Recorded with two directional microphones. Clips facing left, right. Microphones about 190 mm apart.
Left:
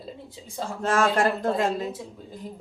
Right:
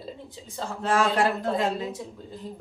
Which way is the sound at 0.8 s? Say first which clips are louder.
Left 1 dB; 45° left (ahead or behind).